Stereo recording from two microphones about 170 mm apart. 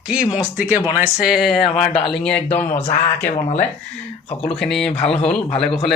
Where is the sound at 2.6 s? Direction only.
40° left (ahead or behind).